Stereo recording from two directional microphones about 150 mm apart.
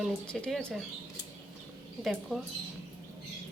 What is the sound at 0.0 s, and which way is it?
Speech, 5° left (ahead or behind).